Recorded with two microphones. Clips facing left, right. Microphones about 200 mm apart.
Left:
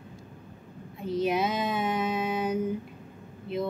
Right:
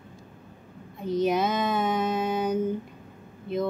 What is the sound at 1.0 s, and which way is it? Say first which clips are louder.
A woman's voice: right 2 dB; 5° left (ahead or behind).